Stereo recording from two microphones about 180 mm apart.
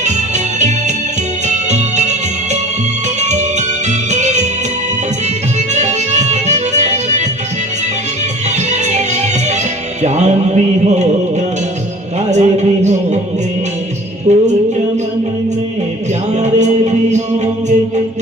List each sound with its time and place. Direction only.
0.0 s music: 40° right (ahead or behind)
5.7 s music: 40° right (ahead or behind)
8.7 s music: 40° right (ahead or behind)
12.3 s a sound: 40° right (ahead or behind)
14.3 s music: 40° right (ahead or behind)
16.3 s music: 40° right (ahead or behind)